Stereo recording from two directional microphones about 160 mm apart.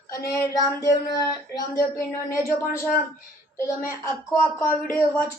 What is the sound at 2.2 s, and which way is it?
Speech, 15° left (ahead or behind).